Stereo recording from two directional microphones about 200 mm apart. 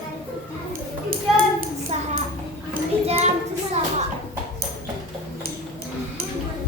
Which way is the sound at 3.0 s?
30° right (ahead or behind).